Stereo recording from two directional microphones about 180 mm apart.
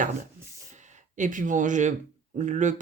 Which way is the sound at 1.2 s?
45° right (ahead or behind).